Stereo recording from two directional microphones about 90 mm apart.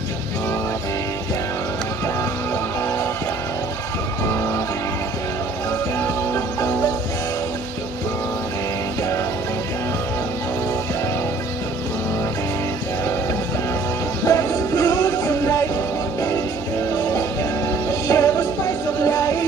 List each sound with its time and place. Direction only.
5.9 s music: 30° left (ahead or behind)
14.2 s music: 40° left (ahead or behind)
18.0 s music: 35° left (ahead or behind)